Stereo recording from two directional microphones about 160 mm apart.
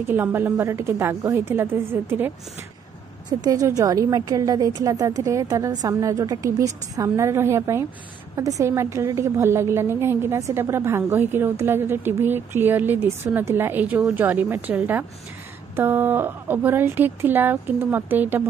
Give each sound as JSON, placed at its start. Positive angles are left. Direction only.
{"t": 0.0, "sound": "a woman's voice", "side_deg": -10}
{"t": 3.3, "sound": "a woman's voice", "side_deg": -25}